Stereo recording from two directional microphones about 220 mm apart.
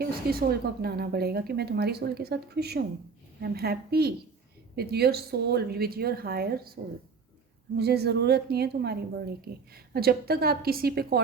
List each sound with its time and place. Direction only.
0.0 s a woman's voice: 45° right (ahead or behind)
7.8 s a woman's voice: 50° right (ahead or behind)